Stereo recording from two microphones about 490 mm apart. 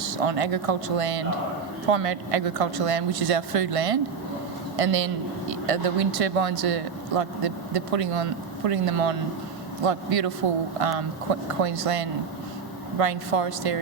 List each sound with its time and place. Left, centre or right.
0.0 s speech: right